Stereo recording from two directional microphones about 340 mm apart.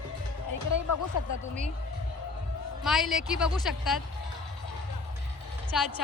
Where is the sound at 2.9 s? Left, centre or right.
Centre.